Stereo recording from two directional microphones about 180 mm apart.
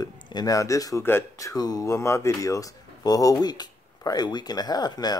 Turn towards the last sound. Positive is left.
turn(degrees=20)  # may be behind; listen again after turning